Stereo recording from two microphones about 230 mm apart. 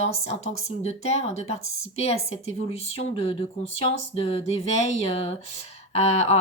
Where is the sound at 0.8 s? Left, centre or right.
Left.